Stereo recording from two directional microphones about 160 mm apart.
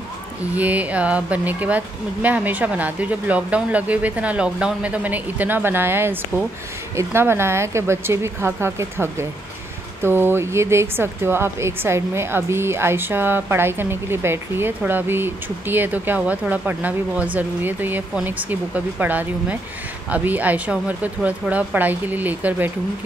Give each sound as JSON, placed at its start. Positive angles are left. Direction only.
{"t": 0.6, "sound": "speech", "side_deg": -10}